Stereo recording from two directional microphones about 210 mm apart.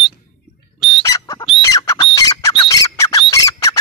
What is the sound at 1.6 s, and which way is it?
Squawk, 15° left (ahead or behind).